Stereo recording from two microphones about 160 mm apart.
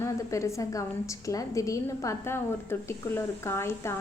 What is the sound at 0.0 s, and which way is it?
A woman's voice, 20° left (ahead or behind).